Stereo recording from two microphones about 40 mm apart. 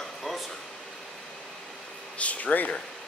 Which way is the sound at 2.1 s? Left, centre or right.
Left.